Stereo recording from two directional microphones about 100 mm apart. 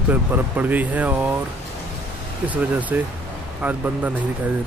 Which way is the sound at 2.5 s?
15° right (ahead or behind).